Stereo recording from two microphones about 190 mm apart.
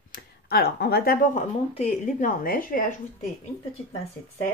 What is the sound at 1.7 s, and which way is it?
A woman's voice, 35° left (ahead or behind).